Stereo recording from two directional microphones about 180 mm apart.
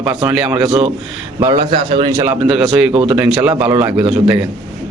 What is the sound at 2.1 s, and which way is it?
Speech, 10° right (ahead or behind).